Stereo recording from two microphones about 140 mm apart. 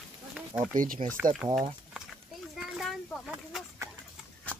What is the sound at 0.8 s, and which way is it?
Speech, 80° right.